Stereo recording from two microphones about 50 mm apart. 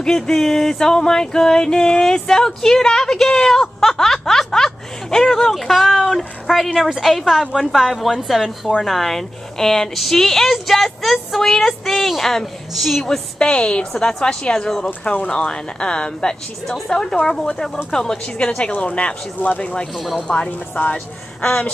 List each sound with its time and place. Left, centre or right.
0.0 s a sound: centre
5.5 s a woman's voice: centre
13.4 s speech: left
15.3 s a sound: centre
16.6 s a woman's voice: centre
17.0 s a sound: centre
17.9 s speech: centre
20.0 s speech: centre
20.4 s speech: left